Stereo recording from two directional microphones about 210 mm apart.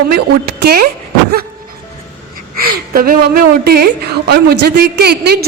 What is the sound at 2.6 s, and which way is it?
A woman's voice, 45° right (ahead or behind).